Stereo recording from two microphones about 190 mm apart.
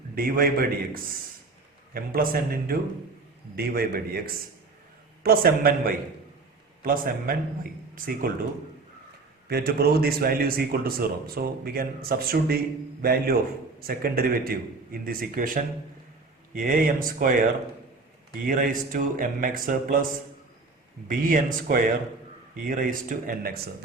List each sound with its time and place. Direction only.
0.2 s a man's voice: 50° right (ahead or behind)
1.9 s a man's voice: 50° right (ahead or behind)
9.5 s a man's voice: 55° right (ahead or behind)
18.4 s a man's voice: 45° right (ahead or behind)
21.1 s a man's voice: 45° right (ahead or behind)